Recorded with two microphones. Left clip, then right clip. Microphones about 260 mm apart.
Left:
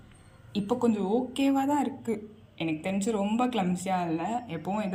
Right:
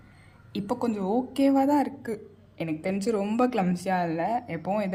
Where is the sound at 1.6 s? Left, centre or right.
Centre.